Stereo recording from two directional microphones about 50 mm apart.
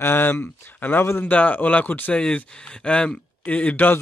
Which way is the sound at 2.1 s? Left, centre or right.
Centre.